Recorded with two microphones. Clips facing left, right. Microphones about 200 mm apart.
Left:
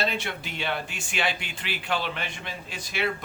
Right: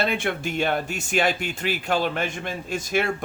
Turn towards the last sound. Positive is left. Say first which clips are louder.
# right 6 dB
turn(degrees=-45)  # may be behind; listen again after turning